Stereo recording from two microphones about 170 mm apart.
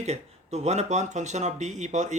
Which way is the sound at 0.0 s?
40° right (ahead or behind).